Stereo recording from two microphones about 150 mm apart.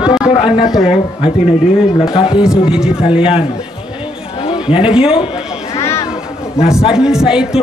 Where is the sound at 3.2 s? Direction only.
35° left (ahead or behind).